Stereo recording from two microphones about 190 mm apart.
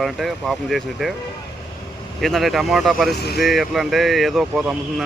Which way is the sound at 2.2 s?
Centre (ahead or behind).